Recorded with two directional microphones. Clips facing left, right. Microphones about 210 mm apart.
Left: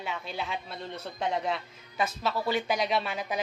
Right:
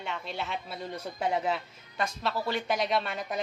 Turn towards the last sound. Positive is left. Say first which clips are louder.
# even
turn(degrees=0)  # may be behind; listen again after turning